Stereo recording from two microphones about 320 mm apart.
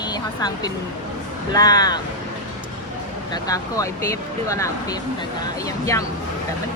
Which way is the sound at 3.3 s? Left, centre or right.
Centre.